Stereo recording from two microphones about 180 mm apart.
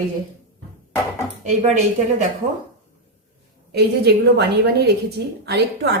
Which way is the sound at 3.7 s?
65° right (ahead or behind).